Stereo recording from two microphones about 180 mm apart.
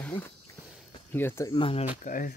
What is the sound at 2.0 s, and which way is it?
Speech, 50° left (ahead or behind).